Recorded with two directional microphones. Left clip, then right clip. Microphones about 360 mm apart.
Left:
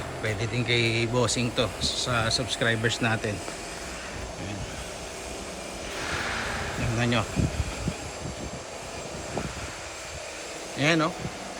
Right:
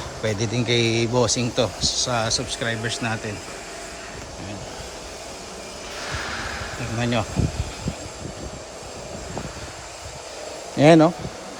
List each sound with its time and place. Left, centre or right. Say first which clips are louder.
0.3 s speech: right 5 dB; centre
7.0 s speech: right 3 dB; centre
10.8 s speech: right 10 dB; centre